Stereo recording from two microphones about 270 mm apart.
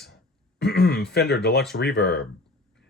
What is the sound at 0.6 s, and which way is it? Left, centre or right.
Speech, left.